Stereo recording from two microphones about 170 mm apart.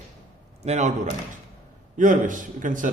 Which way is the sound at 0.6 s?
40° right (ahead or behind).